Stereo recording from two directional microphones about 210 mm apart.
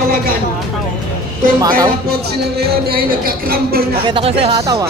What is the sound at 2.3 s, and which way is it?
Speech, 50° right (ahead or behind).